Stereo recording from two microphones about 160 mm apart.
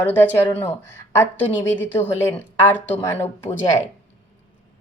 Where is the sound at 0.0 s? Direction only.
15° left (ahead or behind).